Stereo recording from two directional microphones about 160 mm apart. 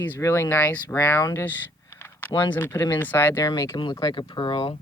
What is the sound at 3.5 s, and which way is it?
Speech, 25° left (ahead or behind).